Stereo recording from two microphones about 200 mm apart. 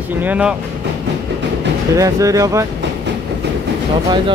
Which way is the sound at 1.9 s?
15° right (ahead or behind).